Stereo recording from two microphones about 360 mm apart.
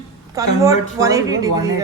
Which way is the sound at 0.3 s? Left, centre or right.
Centre.